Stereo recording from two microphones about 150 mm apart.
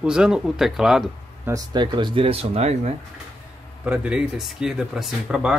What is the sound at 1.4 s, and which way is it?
Speech, 25° right (ahead or behind).